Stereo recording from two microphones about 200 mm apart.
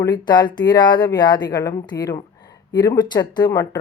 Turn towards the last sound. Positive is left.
turn(degrees=20)  # may be behind; listen again after turning